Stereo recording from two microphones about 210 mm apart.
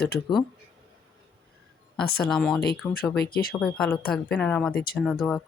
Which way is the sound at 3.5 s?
5° left (ahead or behind).